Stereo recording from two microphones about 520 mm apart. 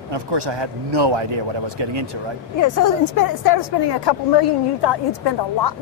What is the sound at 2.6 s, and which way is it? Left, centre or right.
A woman's voice, left.